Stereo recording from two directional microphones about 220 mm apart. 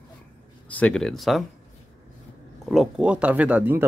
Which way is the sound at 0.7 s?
5° left (ahead or behind).